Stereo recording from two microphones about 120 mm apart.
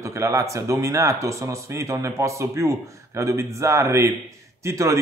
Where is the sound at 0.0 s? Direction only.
25° right (ahead or behind).